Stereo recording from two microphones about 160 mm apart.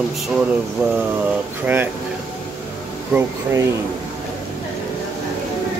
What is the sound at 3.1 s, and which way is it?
Speech, 15° right (ahead or behind).